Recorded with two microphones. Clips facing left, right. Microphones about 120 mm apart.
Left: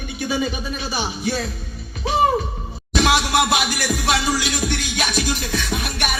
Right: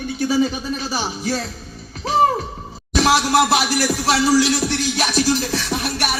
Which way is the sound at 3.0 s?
35° right (ahead or behind).